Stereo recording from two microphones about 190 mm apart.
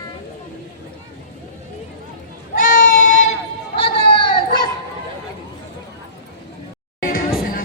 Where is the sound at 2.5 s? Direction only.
45° left (ahead or behind).